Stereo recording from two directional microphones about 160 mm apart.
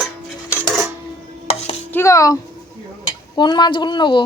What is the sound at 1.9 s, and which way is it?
Speech, 15° left (ahead or behind).